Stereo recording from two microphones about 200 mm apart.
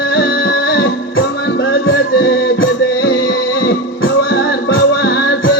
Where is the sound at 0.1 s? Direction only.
55° left (ahead or behind).